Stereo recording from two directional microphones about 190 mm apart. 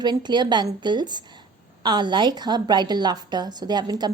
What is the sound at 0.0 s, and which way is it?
A woman's voice, 25° right (ahead or behind).